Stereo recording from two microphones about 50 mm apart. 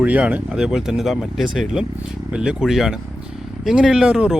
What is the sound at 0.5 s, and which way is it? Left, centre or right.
Speech, centre.